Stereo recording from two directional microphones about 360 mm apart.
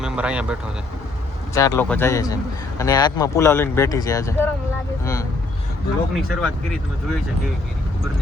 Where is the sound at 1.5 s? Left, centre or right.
Centre.